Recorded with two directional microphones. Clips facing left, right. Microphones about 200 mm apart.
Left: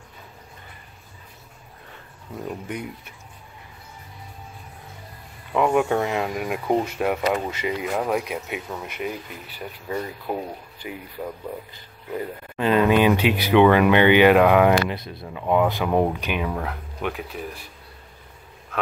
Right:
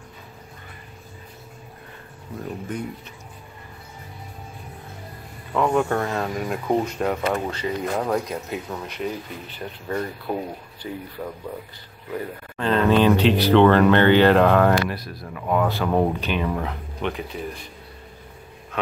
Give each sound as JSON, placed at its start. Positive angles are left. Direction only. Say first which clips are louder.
{"t": 5.5, "sound": "speech", "louder": "left 1 dB", "side_deg": 10}
{"t": 12.5, "sound": "speech", "louder": "left 1 dB", "side_deg": 10}